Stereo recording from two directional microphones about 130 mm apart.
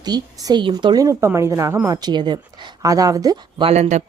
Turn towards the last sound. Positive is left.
turn(degrees=-60)  # may be behind; listen again after turning